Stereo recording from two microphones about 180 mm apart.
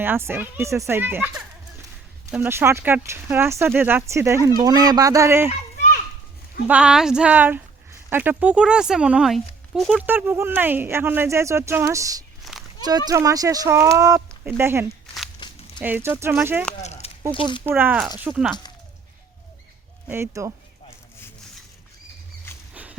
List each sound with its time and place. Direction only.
0.0 s speech: 10° right (ahead or behind)
2.3 s speech: 10° right (ahead or behind)
5.5 s children playing: 45° left (ahead or behind)
6.7 s speech: 5° right (ahead or behind)
10.1 s speech: 10° right (ahead or behind)
15.4 s a sound: 25° left (ahead or behind)
15.8 s speech: 10° right (ahead or behind)
16.8 s a sound: 40° left (ahead or behind)
17.3 s speech: 25° left (ahead or behind)
17.6 s speech: 10° right (ahead or behind)
20.1 s speech: 15° right (ahead or behind)
22.7 s a sound: 10° right (ahead or behind)